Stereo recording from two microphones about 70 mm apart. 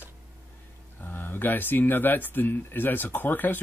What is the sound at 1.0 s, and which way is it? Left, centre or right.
Speech, left.